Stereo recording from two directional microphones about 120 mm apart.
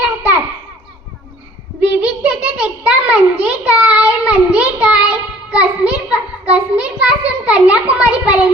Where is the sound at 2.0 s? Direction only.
10° right (ahead or behind).